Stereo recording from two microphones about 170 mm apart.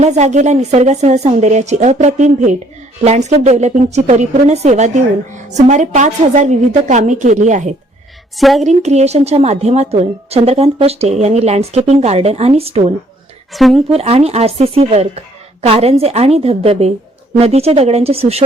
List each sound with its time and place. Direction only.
0.0 s a woman's voice: 45° right (ahead or behind)
8.4 s speech: centre (ahead or behind)
8.6 s a woman's voice: 40° right (ahead or behind)
13.5 s speech: centre (ahead or behind)
13.9 s a woman's voice: 35° right (ahead or behind)